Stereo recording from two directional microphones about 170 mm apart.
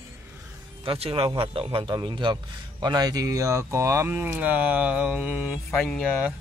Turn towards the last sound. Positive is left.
turn(degrees=5)  # may be behind; listen again after turning